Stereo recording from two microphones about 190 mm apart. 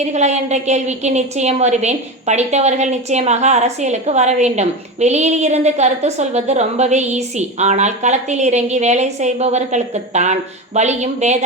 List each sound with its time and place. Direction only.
0.0 s a woman's voice: 35° right (ahead or behind)